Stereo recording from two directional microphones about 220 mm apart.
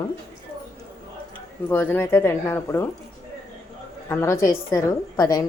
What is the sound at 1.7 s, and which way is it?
A woman's voice, 10° left (ahead or behind).